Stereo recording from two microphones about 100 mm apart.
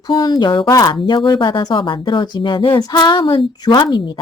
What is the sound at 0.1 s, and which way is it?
Speech, 50° left (ahead or behind).